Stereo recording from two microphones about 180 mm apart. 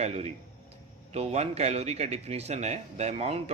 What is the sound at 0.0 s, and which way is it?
A man's voice, 35° right (ahead or behind).